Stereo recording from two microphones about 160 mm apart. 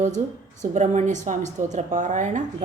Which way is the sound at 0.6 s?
45° right (ahead or behind).